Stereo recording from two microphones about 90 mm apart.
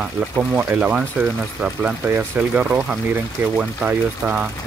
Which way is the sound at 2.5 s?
15° right (ahead or behind).